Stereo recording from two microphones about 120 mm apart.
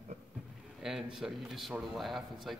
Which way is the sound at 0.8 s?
5° right (ahead or behind).